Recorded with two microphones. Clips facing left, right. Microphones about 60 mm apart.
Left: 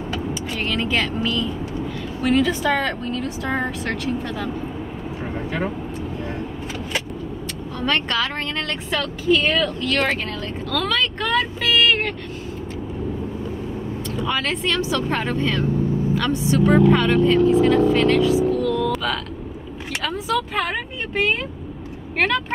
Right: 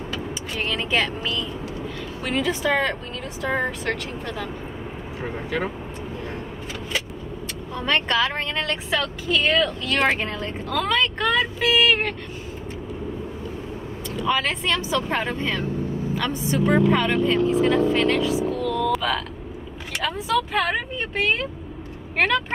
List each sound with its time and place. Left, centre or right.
0.6 s speech: centre
7.8 s speech: centre
9.8 s speech: right
14.2 s speech: centre
22.1 s speech: centre